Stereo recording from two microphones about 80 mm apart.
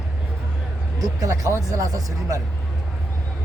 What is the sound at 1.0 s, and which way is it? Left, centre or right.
Speech, right.